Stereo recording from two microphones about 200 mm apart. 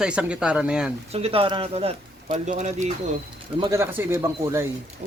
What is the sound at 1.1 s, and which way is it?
Speech, 30° right (ahead or behind).